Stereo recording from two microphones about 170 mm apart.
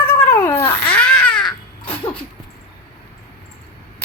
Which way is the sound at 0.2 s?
15° left (ahead or behind).